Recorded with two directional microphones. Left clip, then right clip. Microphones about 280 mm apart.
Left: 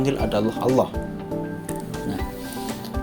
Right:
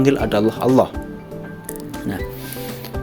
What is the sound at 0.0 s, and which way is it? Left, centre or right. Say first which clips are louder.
Speech: right 6 dB; right.